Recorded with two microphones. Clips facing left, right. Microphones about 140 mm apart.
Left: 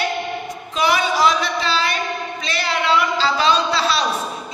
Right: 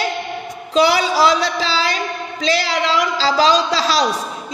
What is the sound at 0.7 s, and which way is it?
A man's voice, 90° right.